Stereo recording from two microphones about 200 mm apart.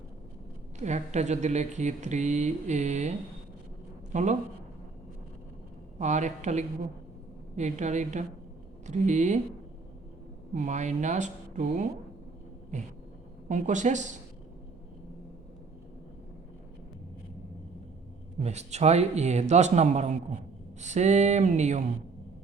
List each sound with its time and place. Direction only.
0.8 s speech: 35° right (ahead or behind)
4.1 s speech: 35° right (ahead or behind)
6.0 s speech: 35° right (ahead or behind)
10.5 s speech: 40° right (ahead or behind)
13.5 s speech: 40° right (ahead or behind)
18.3 s speech: 35° right (ahead or behind)